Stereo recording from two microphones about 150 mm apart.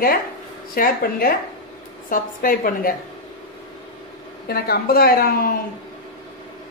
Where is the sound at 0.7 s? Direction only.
75° left (ahead or behind).